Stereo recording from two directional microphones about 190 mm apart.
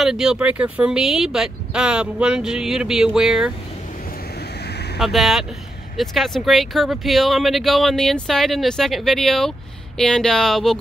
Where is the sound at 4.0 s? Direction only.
50° left (ahead or behind).